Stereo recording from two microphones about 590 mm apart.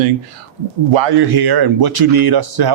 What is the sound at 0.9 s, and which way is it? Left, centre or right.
Speech, right.